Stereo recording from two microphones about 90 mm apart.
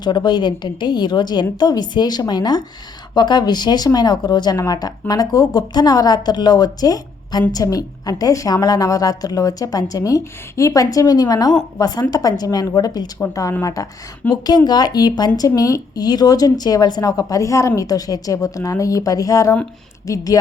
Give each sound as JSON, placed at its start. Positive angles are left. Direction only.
{"t": 0.0, "sound": "a woman's voice", "side_deg": 55}
{"t": 13.3, "sound": "speech", "side_deg": 35}
{"t": 14.4, "sound": "a woman's voice", "side_deg": 50}